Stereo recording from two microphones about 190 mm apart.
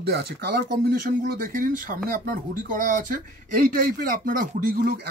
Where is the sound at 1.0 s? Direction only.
45° right (ahead or behind).